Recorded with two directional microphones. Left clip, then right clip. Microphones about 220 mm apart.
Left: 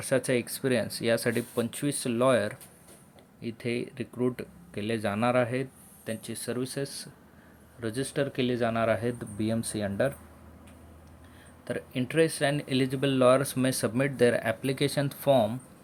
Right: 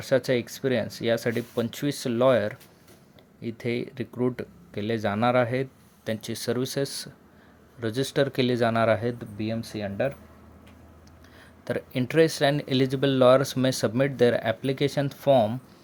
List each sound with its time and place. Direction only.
0.0 s speech: 10° right (ahead or behind)
9.1 s speech: 5° left (ahead or behind)
11.6 s speech: 20° right (ahead or behind)